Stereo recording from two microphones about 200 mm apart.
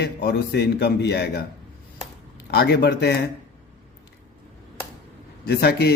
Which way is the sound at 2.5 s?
55° left (ahead or behind).